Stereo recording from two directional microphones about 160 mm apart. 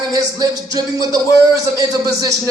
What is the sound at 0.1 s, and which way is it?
A man's voice, 25° right (ahead or behind).